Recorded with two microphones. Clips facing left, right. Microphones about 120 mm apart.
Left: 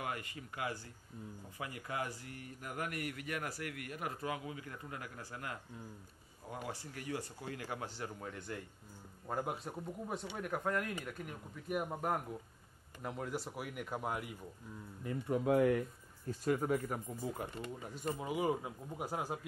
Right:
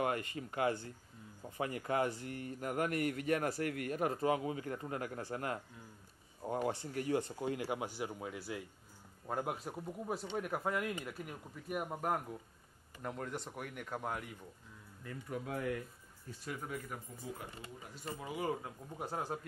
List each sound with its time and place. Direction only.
0.0 s speech: 30° right (ahead or behind); by 14.3 s 5° left (ahead or behind)
15.0 s speech: 25° left (ahead or behind)
15.5 s speech: 50° left (ahead or behind)
18.2 s speech: 15° left (ahead or behind)